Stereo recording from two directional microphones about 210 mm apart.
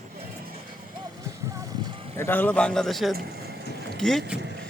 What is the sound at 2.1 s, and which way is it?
A man's voice, 10° left (ahead or behind).